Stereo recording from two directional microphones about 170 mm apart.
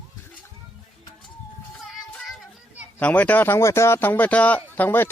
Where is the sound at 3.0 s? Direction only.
10° left (ahead or behind).